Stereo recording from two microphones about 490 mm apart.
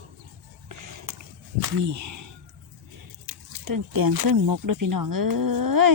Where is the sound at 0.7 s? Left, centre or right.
Right.